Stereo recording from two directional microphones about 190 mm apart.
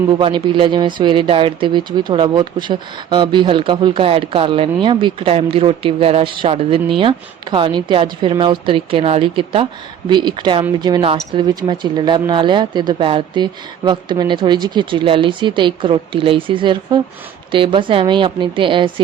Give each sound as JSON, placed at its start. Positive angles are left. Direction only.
{"t": 0.2, "sound": "speech", "side_deg": -25}